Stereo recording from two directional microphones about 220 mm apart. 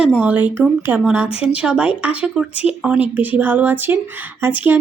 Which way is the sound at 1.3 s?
25° left (ahead or behind).